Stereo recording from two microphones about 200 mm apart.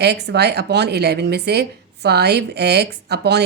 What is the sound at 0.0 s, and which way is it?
Speech, 55° right (ahead or behind).